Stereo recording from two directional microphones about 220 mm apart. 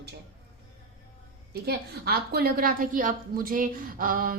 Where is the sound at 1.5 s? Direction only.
45° right (ahead or behind).